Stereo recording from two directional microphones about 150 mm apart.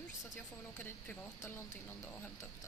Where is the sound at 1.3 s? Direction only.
15° left (ahead or behind).